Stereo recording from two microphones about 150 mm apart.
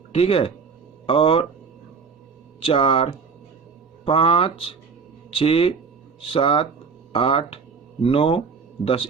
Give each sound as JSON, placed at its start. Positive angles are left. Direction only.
{"t": 0.1, "sound": "speech", "side_deg": 40}
{"t": 2.6, "sound": "speech", "side_deg": 35}